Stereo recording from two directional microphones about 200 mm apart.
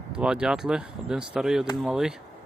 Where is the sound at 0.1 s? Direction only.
5° right (ahead or behind).